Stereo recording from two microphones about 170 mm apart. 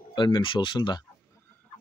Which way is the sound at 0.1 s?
30° left (ahead or behind).